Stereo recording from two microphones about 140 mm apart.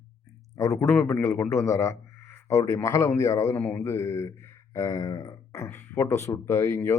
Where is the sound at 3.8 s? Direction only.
20° left (ahead or behind).